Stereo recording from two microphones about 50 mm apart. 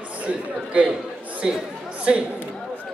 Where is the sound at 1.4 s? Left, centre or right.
Centre.